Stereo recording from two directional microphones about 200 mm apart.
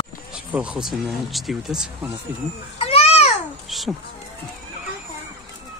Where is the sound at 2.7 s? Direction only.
30° left (ahead or behind).